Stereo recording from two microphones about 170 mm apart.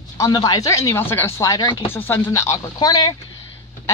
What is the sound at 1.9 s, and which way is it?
A woman's voice, 15° left (ahead or behind).